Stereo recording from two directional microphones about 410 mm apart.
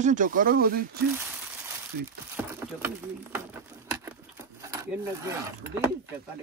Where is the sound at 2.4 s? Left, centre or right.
Centre.